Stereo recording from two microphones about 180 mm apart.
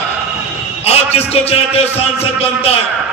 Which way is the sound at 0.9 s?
35° left (ahead or behind).